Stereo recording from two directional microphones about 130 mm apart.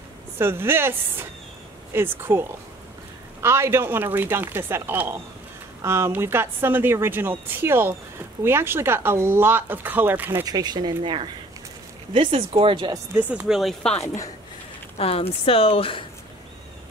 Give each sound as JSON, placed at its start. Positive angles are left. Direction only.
{"t": 0.4, "sound": "speech", "side_deg": -20}
{"t": 3.4, "sound": "speech", "side_deg": -20}
{"t": 10.4, "sound": "speech", "side_deg": -30}
{"t": 12.9, "sound": "speech", "side_deg": -15}
{"t": 13.5, "sound": "speech", "side_deg": 0}
{"t": 14.0, "sound": "a woman's voice", "side_deg": 25}
{"t": 15.0, "sound": "speech", "side_deg": 45}